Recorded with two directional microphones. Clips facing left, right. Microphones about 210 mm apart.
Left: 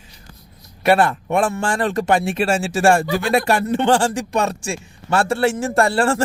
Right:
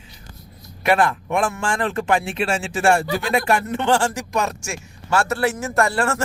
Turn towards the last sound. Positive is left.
turn(degrees=30)  # may be behind; listen again after turning